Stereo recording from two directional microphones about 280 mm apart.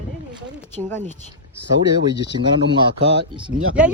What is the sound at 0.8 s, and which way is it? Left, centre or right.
Speech, centre.